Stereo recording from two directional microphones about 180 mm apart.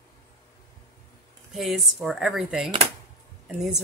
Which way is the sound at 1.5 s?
Centre (ahead or behind).